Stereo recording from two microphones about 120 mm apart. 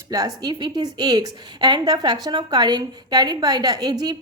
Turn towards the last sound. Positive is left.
turn(degrees=-35)  # may be behind; listen again after turning